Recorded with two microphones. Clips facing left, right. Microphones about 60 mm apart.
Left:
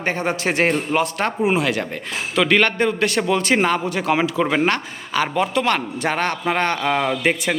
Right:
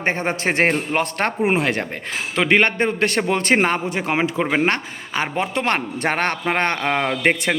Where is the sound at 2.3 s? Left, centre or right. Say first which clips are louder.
Even; right.